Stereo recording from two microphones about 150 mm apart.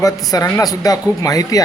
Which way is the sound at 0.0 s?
25° left (ahead or behind).